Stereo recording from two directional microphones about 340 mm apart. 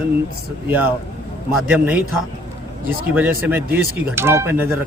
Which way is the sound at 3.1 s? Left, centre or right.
Centre.